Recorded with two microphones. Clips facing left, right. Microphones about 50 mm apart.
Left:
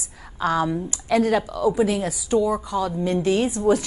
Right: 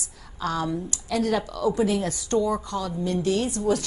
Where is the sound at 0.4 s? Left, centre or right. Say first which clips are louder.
Left 5 dB; left.